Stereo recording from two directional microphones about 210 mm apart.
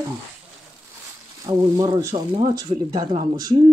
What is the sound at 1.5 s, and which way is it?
Speech, 15° right (ahead or behind).